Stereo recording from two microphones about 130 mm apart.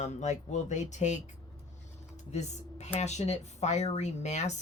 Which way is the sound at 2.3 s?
60° left (ahead or behind).